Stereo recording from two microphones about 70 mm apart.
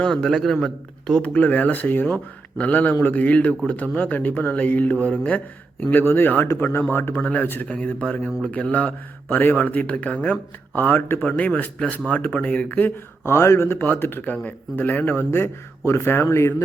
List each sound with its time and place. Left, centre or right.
0.0 s speech: centre
1.2 s a man's voice: left
7.2 s speech: centre
7.4 s speech: left
7.7 s speech: centre
10.8 s speech: left
13.2 s a man's voice: left